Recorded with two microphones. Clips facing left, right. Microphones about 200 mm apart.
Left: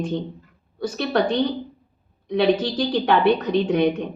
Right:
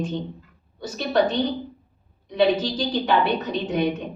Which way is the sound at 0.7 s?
60° left (ahead or behind).